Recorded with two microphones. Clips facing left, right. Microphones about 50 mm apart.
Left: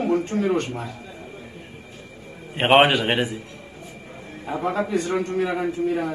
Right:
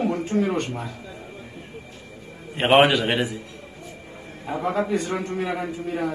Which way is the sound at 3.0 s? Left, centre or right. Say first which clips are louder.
Left 1 dB; centre.